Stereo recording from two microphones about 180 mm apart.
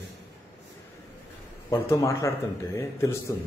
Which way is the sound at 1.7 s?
15° left (ahead or behind).